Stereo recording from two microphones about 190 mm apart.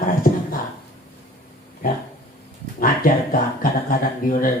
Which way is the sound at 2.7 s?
50° left (ahead or behind).